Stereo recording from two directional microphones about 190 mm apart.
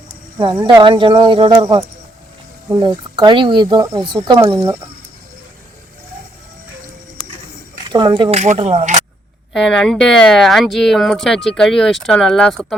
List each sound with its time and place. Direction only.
0.5 s speech: 20° right (ahead or behind)
7.9 s speech: 20° right (ahead or behind)
8.3 s speech: 35° right (ahead or behind)
9.5 s speech: centre (ahead or behind)